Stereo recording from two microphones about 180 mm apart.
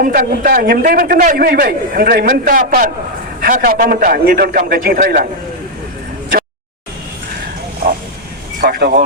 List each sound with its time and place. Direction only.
0.0 s a man's voice: 55° right (ahead or behind)
8.6 s vehicle: 50° right (ahead or behind)